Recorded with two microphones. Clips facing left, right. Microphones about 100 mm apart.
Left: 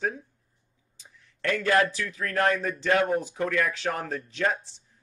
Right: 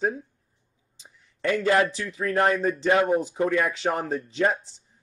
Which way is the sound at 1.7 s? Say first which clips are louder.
Even; 30° right (ahead or behind).